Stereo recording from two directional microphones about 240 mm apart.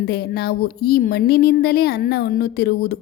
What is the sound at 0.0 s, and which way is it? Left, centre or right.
Speech, left.